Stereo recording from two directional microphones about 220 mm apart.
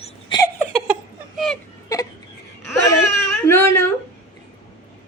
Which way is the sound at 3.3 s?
10° left (ahead or behind).